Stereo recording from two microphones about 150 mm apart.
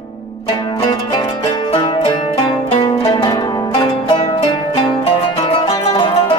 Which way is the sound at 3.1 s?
30° left (ahead or behind).